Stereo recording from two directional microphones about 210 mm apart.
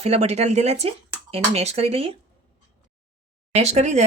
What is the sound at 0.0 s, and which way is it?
Speech, 30° right (ahead or behind).